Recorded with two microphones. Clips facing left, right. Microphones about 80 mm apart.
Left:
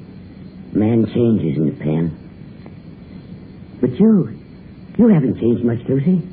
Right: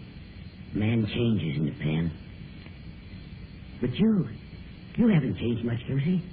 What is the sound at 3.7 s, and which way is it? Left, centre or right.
A woman's voice, left.